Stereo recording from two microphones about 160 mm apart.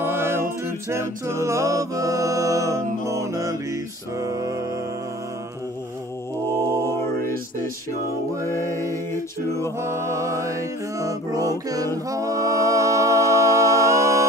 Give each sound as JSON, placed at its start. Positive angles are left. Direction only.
{"t": 0.0, "sound": "a capella", "side_deg": -15}
{"t": 4.2, "sound": "mantra", "side_deg": -20}
{"t": 6.5, "sound": "mantra", "side_deg": -20}
{"t": 6.8, "sound": "mantra", "side_deg": 15}
{"t": 8.5, "sound": "a sound", "side_deg": 15}
{"t": 9.8, "sound": "mantra", "side_deg": -15}
{"t": 12.1, "sound": "music", "side_deg": -20}